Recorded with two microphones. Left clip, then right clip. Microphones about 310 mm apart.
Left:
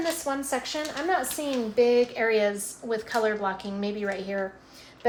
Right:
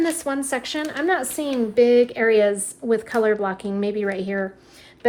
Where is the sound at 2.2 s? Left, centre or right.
Right.